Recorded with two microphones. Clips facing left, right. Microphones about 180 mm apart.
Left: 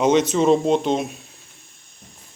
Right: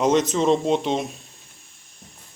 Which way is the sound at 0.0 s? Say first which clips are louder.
Left 2 dB; centre (ahead or behind).